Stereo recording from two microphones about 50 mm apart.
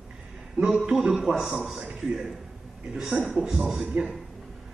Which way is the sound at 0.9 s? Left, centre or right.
Centre.